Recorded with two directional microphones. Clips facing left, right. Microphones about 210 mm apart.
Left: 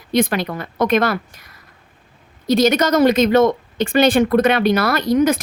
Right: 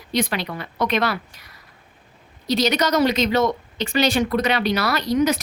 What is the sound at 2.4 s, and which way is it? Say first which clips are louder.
A woman's voice: left 5 dB; 50° left (ahead or behind).